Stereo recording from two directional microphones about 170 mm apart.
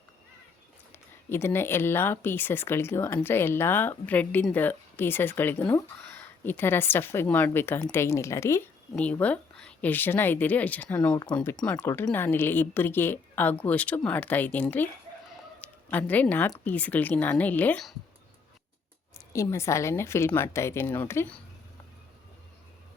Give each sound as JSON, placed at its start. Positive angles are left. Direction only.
{"t": 1.3, "sound": "speech", "side_deg": 15}
{"t": 19.3, "sound": "speech", "side_deg": 15}